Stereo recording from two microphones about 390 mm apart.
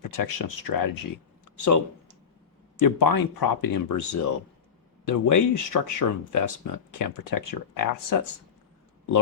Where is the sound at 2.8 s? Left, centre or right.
Left.